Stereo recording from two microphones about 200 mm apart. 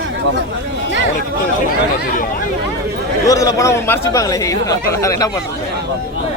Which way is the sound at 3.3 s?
15° left (ahead or behind).